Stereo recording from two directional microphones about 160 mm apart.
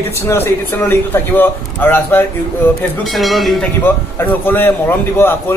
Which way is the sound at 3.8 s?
15° left (ahead or behind).